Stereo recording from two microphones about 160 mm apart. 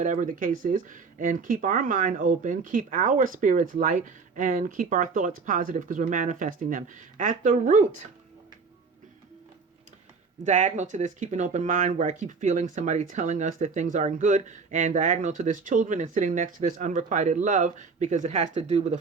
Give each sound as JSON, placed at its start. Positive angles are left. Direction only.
{"t": 0.0, "sound": "speech", "side_deg": -55}
{"t": 10.4, "sound": "speech", "side_deg": -50}